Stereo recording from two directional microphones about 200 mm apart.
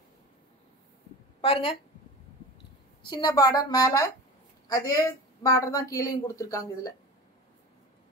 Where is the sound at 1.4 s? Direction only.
30° left (ahead or behind).